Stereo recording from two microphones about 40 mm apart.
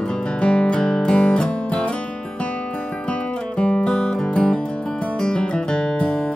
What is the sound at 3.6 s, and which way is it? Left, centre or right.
Music, left.